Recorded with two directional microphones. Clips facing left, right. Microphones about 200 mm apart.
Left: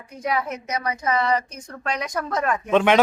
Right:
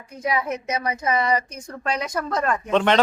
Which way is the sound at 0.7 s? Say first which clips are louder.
Even; 25° right (ahead or behind).